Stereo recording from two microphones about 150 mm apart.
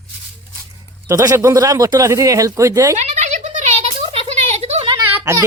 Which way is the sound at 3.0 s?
50° right (ahead or behind).